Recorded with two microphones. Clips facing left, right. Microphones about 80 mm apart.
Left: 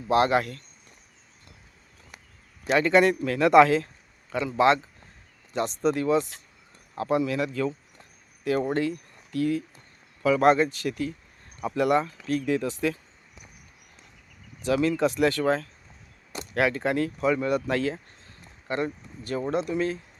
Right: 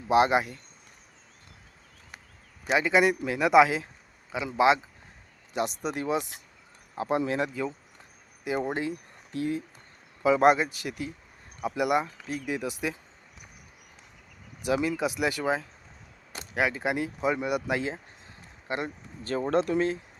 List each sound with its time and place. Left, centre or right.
0.1 s speech: centre
2.6 s speech: centre
14.6 s speech: centre
19.2 s speech: right
19.5 s speech: right